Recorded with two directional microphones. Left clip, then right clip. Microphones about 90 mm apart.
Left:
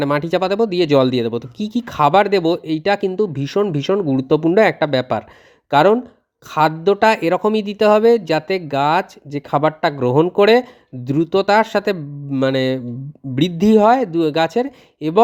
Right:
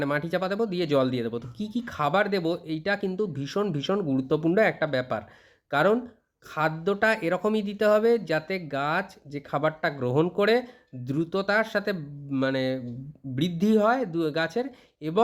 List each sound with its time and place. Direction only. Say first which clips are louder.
0.0 s speech: left 10 dB; 60° left (ahead or behind)
3.2 s speech: left 10 dB; 45° left (ahead or behind)
5.7 s speech: left 10 dB; 45° left (ahead or behind); by 12.8 s 65° left (ahead or behind)
13.3 s speech: left 10 dB; 55° left (ahead or behind)